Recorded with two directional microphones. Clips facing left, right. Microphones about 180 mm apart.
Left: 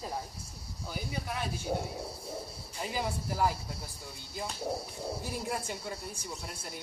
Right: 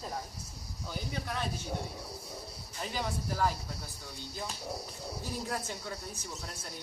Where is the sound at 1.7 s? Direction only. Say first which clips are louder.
Left 7 dB; 40° left (ahead or behind).